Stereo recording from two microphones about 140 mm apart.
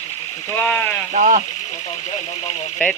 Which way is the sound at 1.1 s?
70° right (ahead or behind).